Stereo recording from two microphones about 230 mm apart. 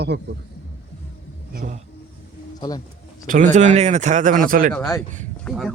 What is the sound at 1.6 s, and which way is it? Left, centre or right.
Speech, right.